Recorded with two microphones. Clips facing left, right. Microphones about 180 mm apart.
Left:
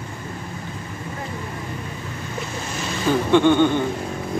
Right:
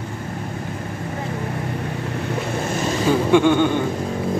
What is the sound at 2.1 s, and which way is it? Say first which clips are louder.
Vehicle: right 7 dB; 60° right (ahead or behind).